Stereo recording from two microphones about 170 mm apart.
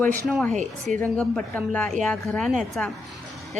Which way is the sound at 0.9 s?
5° left (ahead or behind).